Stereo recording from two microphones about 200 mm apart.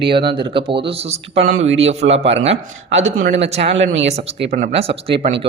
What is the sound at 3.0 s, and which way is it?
Speech, 70° right (ahead or behind).